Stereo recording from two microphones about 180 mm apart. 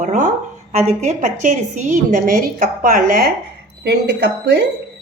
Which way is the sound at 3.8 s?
65° right (ahead or behind).